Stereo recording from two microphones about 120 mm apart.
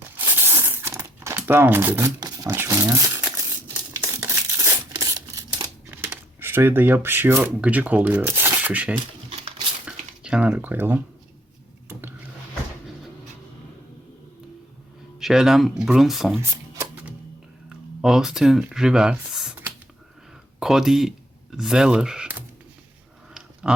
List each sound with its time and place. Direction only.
0.2 s crumpling: 20° right (ahead or behind)
2.2 s a sound: 30° right (ahead or behind)
2.6 s speech: 30° right (ahead or behind)
3.9 s a sound: 20° right (ahead or behind)
5.9 s speech: 20° right (ahead or behind)
9.8 s a sound: 10° right (ahead or behind)
15.2 s speech: 5° right (ahead or behind)
16.4 s shuffling cards: 25° right (ahead or behind)
17.7 s speech: 5° right (ahead or behind)
19.3 s computer keyboard: 5° right (ahead or behind)
20.6 s speech: 5° right (ahead or behind)
23.3 s a sound: 5° right (ahead or behind)